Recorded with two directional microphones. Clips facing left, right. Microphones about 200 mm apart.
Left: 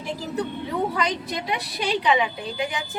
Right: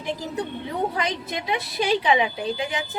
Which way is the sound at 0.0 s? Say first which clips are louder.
Even; 20° right (ahead or behind).